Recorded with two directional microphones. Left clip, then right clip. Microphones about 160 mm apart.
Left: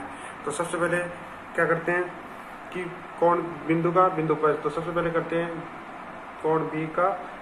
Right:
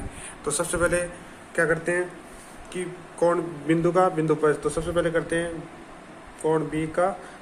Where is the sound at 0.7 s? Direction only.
90° right.